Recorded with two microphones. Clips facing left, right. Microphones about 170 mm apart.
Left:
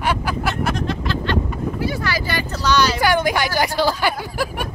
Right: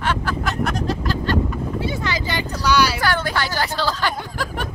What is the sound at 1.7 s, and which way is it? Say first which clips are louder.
Vehicle: left 1 dB; 20° right (ahead or behind).